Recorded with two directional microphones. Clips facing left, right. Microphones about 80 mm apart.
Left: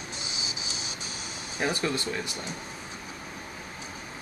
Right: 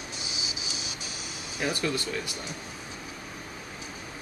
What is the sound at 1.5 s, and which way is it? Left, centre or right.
Speech, left.